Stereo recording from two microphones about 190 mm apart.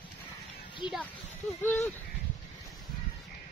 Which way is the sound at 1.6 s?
10° left (ahead or behind).